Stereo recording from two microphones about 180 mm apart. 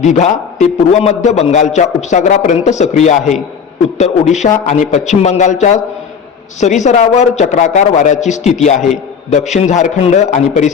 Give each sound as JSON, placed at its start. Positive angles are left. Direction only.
{"t": 0.0, "sound": "a man's voice", "side_deg": 40}